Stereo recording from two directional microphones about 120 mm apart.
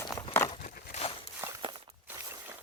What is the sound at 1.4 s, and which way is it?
Walk, 25° right (ahead or behind).